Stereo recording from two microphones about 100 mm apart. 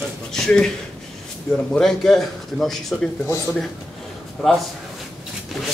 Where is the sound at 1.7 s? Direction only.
5° left (ahead or behind).